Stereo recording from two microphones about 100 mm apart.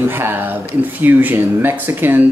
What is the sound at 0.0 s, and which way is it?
Speech, 20° right (ahead or behind).